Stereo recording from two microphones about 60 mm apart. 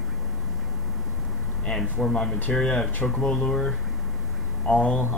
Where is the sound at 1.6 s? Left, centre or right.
Centre.